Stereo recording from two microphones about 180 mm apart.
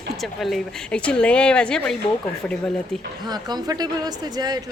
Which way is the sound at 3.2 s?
20° right (ahead or behind).